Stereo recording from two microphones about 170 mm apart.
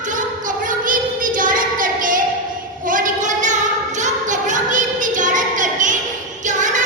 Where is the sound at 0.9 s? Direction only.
50° right (ahead or behind).